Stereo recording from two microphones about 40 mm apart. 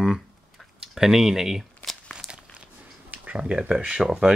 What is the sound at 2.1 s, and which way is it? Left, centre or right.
Crumpling, centre.